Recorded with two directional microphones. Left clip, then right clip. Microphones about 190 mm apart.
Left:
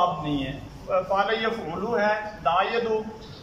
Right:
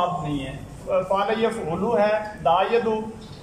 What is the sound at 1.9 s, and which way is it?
Speech, 25° right (ahead or behind).